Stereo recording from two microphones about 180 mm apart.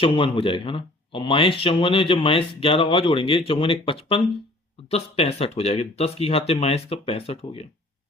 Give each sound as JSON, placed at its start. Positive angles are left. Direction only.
{"t": 0.0, "sound": "speech", "side_deg": 30}